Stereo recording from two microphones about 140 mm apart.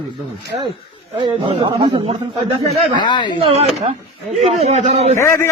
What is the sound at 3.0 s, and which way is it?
Speech, 30° left (ahead or behind).